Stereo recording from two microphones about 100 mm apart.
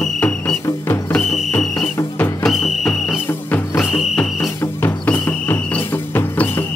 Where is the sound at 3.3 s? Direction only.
20° left (ahead or behind).